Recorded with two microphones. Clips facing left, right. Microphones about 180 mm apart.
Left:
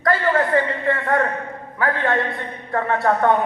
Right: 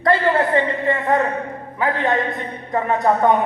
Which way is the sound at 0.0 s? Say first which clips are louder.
Right 2 dB; 20° right (ahead or behind).